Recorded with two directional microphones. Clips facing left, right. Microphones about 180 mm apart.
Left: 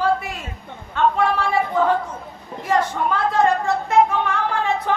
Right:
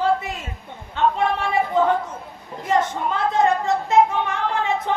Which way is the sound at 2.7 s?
20° right (ahead or behind).